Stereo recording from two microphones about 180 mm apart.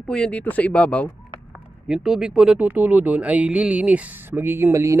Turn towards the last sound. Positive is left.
turn(degrees=-15)  # may be behind; listen again after turning